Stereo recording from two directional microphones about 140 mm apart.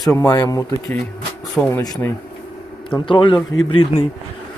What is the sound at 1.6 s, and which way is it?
Speech, 10° left (ahead or behind).